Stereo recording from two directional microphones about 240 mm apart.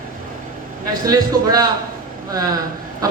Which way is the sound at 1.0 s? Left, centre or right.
Centre.